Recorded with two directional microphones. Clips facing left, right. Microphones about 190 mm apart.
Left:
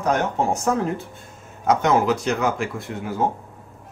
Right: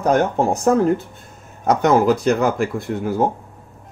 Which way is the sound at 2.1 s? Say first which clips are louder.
Right 5 dB; 55° right (ahead or behind).